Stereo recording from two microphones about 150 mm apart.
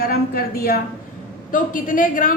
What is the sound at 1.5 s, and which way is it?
Speech, 65° left (ahead or behind).